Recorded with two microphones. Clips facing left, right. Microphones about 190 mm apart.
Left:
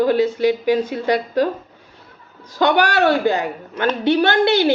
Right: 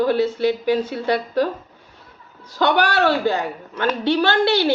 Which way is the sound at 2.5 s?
15° left (ahead or behind).